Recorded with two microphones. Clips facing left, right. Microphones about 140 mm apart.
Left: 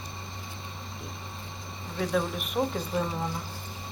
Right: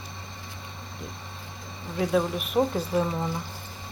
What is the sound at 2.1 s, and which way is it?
Speech, centre (ahead or behind).